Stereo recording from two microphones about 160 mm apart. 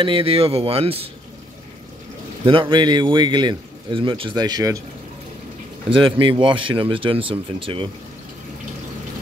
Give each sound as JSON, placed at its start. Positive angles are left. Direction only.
{"t": 0.0, "sound": "speech", "side_deg": -35}
{"t": 2.4, "sound": "a man's voice", "side_deg": -30}
{"t": 5.9, "sound": "speech", "side_deg": -30}